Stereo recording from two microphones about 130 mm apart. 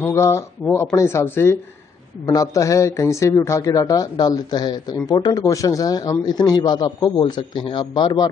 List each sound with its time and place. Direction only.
0.0 s a man's voice: 20° left (ahead or behind)